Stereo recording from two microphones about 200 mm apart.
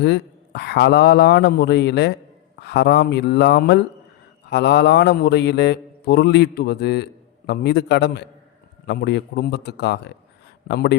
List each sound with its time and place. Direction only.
0.0 s mantra: 60° left (ahead or behind)